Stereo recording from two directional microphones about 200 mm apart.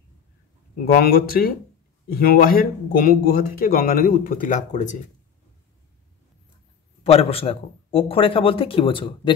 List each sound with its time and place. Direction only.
0.9 s speech: 50° left (ahead or behind)
7.0 s a man's voice: 30° left (ahead or behind)